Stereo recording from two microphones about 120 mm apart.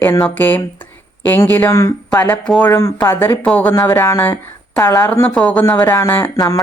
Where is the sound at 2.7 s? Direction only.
25° left (ahead or behind).